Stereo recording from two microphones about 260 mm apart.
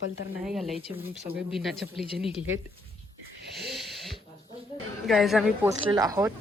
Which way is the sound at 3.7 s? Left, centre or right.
Centre.